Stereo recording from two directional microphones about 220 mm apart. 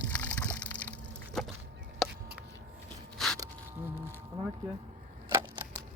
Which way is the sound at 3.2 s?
Centre (ahead or behind).